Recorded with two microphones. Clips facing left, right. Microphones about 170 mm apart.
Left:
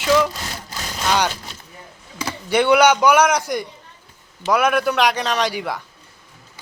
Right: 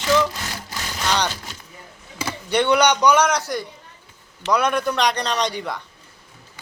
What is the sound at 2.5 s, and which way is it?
A man's voice, 10° left (ahead or behind).